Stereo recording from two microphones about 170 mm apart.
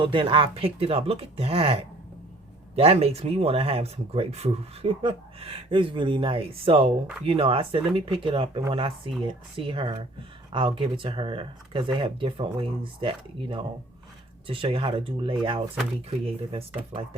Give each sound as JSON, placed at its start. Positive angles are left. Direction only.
{"t": 0.0, "sound": "speech", "side_deg": -30}